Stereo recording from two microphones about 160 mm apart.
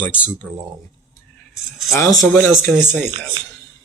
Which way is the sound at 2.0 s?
20° left (ahead or behind).